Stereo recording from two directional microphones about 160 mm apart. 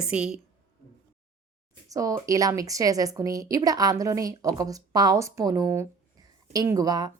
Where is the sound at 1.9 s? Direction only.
20° right (ahead or behind).